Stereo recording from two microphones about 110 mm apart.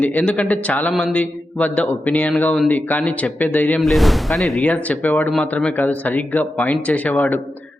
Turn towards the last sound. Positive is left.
turn(degrees=15)  # may be behind; listen again after turning